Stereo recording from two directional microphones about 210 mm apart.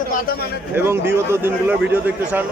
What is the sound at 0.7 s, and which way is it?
A man's voice, 10° right (ahead or behind).